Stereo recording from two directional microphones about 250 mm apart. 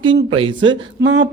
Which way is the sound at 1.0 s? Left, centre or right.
Right.